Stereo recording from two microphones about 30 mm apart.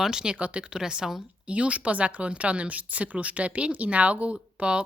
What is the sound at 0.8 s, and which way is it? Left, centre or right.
Speech, centre.